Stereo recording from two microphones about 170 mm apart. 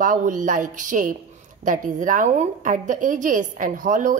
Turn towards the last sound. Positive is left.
turn(degrees=-50)  # may be behind; listen again after turning